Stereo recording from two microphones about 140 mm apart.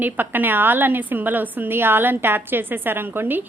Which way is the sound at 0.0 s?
15° right (ahead or behind).